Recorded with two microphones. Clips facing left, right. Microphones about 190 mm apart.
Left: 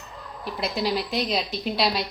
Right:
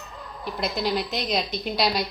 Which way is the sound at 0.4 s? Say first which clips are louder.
Even; 5° left (ahead or behind).